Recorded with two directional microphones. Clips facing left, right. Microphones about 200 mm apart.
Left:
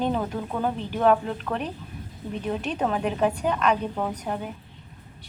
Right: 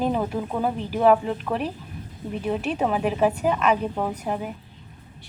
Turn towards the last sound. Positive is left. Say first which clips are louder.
# right 2 dB
turn(degrees=-10)  # may be behind; listen again after turning